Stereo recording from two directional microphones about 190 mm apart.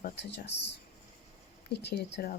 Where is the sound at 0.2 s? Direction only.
65° left (ahead or behind).